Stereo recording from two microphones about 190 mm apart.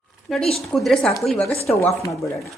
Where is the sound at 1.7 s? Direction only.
15° left (ahead or behind).